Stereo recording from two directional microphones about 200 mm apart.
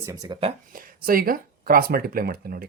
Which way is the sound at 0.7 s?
45° right (ahead or behind).